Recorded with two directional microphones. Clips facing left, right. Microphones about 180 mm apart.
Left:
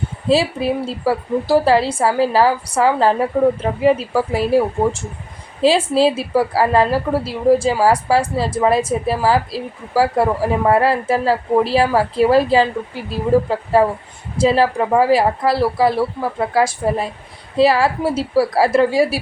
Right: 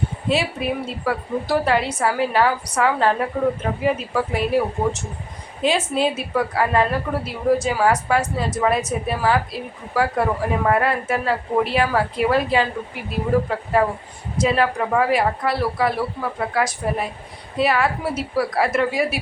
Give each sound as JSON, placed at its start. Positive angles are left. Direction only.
{"t": 0.3, "sound": "a woman's voice", "side_deg": 30}